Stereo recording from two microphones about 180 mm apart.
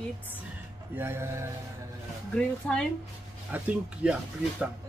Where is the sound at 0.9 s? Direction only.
15° right (ahead or behind).